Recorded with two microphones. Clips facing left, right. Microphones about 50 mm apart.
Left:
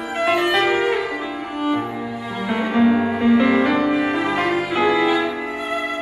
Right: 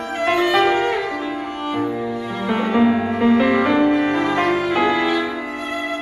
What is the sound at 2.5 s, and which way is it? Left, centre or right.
Music, centre.